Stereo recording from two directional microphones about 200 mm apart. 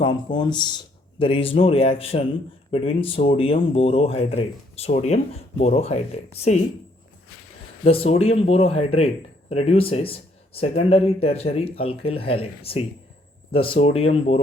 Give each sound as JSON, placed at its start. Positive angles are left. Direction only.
{"t": 0.0, "sound": "speech", "side_deg": 25}
{"t": 7.9, "sound": "speech", "side_deg": 30}